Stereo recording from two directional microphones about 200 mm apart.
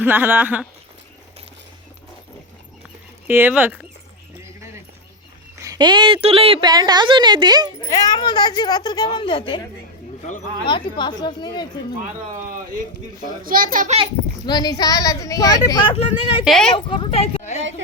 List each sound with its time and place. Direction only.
0.0 s speech: 10° right (ahead or behind)
3.2 s speech: 10° right (ahead or behind)
5.6 s a woman's voice: 20° right (ahead or behind)
7.8 s speech: 15° left (ahead or behind)
10.7 s speech: 25° left (ahead or behind)
13.4 s a child's voice: 45° right (ahead or behind)
14.4 s speech: 20° left (ahead or behind)
16.4 s speech: centre (ahead or behind)
16.7 s speech: 25° left (ahead or behind)